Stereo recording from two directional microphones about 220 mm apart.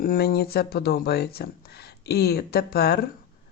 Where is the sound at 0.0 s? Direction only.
40° left (ahead or behind).